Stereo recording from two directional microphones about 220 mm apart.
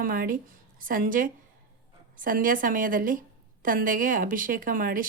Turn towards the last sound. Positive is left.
turn(degrees=-40)  # may be behind; listen again after turning